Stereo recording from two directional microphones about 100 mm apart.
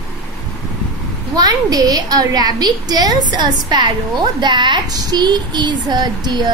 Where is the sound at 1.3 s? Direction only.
40° right (ahead or behind).